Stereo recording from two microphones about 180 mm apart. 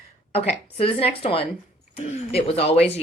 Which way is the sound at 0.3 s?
35° left (ahead or behind).